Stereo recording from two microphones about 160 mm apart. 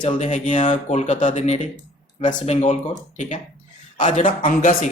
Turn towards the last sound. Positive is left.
turn(degrees=55)  # may be behind; listen again after turning